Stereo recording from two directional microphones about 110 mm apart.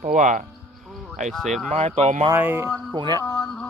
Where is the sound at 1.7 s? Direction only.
80° right.